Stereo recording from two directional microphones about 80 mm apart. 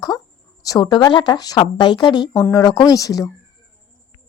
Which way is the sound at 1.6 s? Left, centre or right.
Left.